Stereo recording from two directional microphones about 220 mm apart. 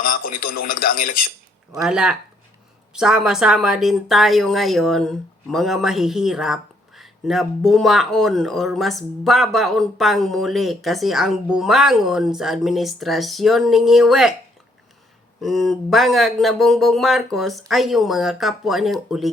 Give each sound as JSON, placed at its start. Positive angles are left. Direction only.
{"t": 0.0, "sound": "a man's voice", "side_deg": 40}
{"t": 1.7, "sound": "a woman's voice", "side_deg": 0}
{"t": 15.4, "sound": "a woman's voice", "side_deg": 0}